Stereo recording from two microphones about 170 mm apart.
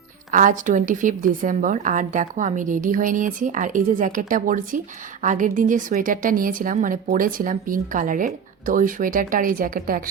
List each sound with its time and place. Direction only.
0.3 s a woman's voice: 50° right (ahead or behind)